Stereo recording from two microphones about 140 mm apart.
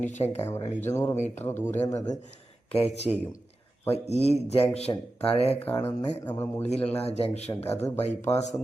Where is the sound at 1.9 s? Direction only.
25° left (ahead or behind).